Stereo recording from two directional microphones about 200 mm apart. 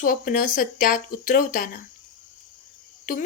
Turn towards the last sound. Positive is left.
turn(degrees=40)  # may be behind; listen again after turning